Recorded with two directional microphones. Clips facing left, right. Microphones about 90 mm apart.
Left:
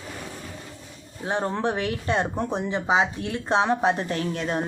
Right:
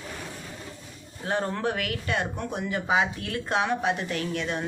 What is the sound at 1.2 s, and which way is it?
Speech, 20° left (ahead or behind).